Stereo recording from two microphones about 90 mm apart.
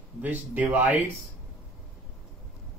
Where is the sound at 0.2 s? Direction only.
20° right (ahead or behind).